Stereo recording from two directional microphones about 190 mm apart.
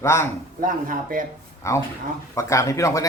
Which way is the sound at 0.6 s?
45° right (ahead or behind).